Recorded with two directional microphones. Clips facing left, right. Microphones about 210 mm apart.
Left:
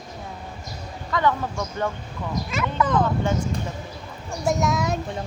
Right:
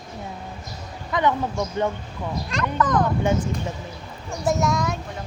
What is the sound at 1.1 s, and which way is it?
Speech, 20° right (ahead or behind).